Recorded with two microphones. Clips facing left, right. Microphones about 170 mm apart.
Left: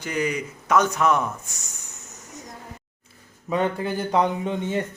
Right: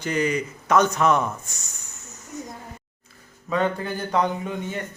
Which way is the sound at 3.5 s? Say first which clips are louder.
Even; 20° left (ahead or behind).